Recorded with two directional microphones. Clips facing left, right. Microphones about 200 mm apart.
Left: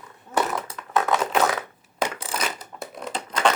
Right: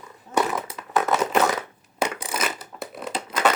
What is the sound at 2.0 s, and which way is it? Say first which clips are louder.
Coin: right 1 dB; 10° right (ahead or behind).